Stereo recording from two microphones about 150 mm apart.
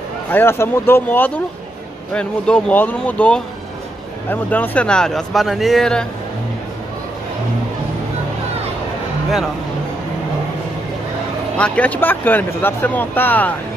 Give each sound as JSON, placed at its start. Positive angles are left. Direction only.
{"t": 0.3, "sound": "speech", "side_deg": 15}
{"t": 11.5, "sound": "speech", "side_deg": 10}